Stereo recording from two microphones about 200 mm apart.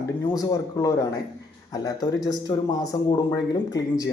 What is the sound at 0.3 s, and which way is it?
Speech, 15° left (ahead or behind).